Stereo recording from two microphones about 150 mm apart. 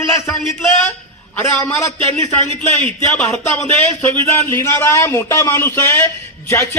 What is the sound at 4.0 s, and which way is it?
A woman's voice, 15° left (ahead or behind).